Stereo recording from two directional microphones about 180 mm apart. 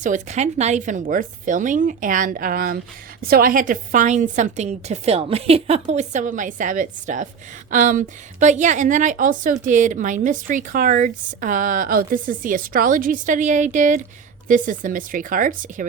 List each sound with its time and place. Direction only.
0.0 s a woman's voice: 40° right (ahead or behind)